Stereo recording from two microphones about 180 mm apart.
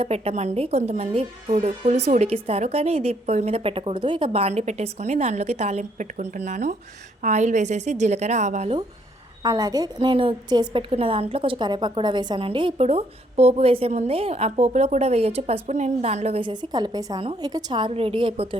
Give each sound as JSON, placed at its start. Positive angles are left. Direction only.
{"t": 0.0, "sound": "a woman's voice", "side_deg": -35}
{"t": 9.4, "sound": "a woman's voice", "side_deg": -20}